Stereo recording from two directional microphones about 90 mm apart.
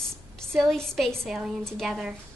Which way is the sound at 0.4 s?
5° left (ahead or behind).